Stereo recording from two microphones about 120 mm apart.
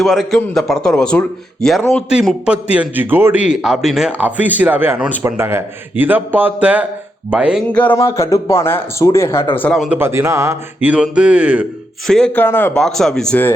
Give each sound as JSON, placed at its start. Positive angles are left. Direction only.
{"t": 0.0, "sound": "a man's voice", "side_deg": 0}
{"t": 3.4, "sound": "a man's voice", "side_deg": -5}
{"t": 7.7, "sound": "speech", "side_deg": 10}
{"t": 7.9, "sound": "speech", "side_deg": 25}
{"t": 9.9, "sound": "speech", "side_deg": -20}
{"t": 10.8, "sound": "a man's voice", "side_deg": -10}
{"t": 12.0, "sound": "speech", "side_deg": 5}
{"t": 12.7, "sound": "a man's voice", "side_deg": 5}